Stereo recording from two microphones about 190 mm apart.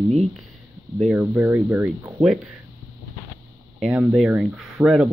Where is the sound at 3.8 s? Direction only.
5° right (ahead or behind).